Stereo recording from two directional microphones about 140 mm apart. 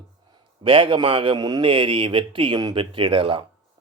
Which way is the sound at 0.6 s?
35° right (ahead or behind).